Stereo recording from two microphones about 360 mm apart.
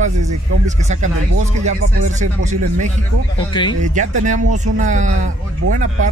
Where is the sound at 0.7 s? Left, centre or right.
Centre.